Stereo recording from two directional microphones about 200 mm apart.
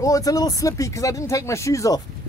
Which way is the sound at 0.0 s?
15° left (ahead or behind).